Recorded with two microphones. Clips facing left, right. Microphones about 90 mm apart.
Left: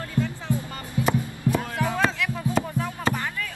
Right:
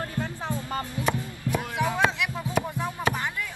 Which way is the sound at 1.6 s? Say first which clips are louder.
Even; 15° right (ahead or behind).